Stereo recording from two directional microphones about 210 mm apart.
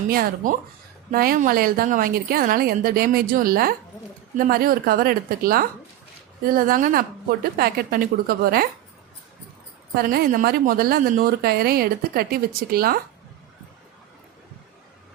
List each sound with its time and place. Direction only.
0.1 s a woman's voice: 45° right (ahead or behind)
9.9 s a woman's voice: 45° right (ahead or behind)